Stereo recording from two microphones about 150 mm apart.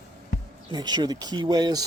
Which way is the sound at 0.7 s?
25° right (ahead or behind).